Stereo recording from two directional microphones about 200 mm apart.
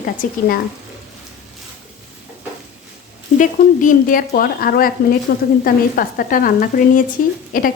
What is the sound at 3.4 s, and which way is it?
A woman's voice, 40° left (ahead or behind).